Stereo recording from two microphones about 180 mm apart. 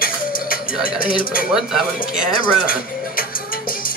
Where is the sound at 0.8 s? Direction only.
50° left (ahead or behind).